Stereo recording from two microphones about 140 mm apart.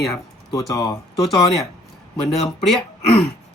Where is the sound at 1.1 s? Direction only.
Centre (ahead or behind).